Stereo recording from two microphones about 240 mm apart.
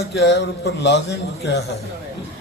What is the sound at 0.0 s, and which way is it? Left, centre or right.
Speech, left.